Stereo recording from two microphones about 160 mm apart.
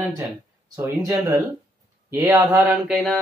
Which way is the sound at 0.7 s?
15° right (ahead or behind).